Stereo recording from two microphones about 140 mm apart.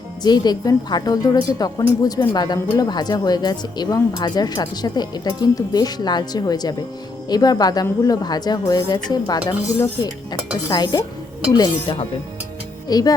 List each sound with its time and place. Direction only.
0.2 s speech: 30° left (ahead or behind)
10.7 s speech: 30° left (ahead or behind)